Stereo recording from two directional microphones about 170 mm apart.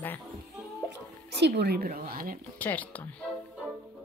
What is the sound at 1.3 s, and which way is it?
A woman's voice, 80° right.